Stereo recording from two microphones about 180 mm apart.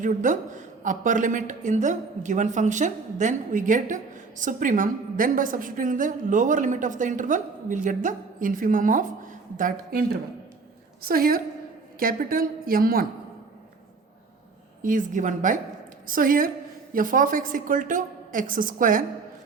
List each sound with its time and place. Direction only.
0.0 s a woman's voice: 45° right (ahead or behind)
14.8 s a woman's voice: 45° right (ahead or behind)